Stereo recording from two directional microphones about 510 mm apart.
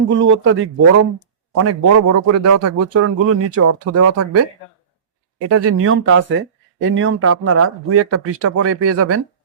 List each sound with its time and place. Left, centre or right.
0.3 s a man's voice: right